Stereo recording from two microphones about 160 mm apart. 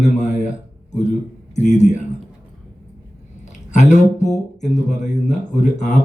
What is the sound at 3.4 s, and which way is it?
Speech, 50° left (ahead or behind).